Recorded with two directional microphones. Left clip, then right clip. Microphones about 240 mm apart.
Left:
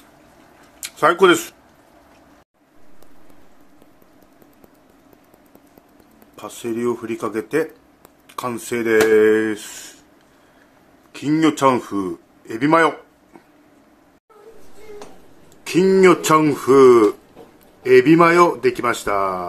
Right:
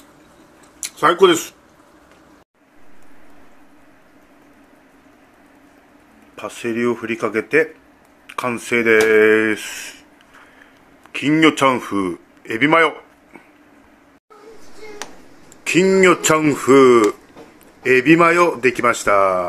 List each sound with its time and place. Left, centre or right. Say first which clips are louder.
0.7 s speech: right 1 dB; centre
6.3 s speech: right 3 dB; centre
8.6 s a man's voice: right 2 dB; centre
11.1 s a man's voice: right 4 dB; centre
15.6 s a man's voice: even; centre